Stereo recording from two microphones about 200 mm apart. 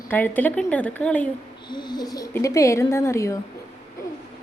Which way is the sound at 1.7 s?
20° left (ahead or behind).